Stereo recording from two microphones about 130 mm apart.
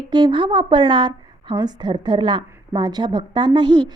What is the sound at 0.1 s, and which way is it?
A woman's voice, 35° right (ahead or behind).